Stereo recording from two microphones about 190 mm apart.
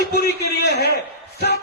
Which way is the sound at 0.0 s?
60° left (ahead or behind).